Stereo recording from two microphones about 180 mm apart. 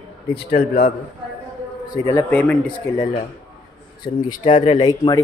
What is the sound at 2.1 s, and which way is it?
Speech, 10° left (ahead or behind).